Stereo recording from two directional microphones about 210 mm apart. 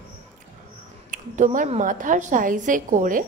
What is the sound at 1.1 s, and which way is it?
A woman's voice, 35° right (ahead or behind).